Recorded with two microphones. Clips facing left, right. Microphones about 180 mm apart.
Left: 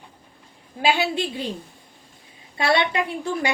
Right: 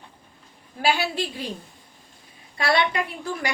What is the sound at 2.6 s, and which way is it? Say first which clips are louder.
Speech: left 1 dB; 25° left (ahead or behind).